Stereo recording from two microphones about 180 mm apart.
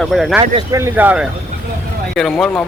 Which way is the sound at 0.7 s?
10° right (ahead or behind).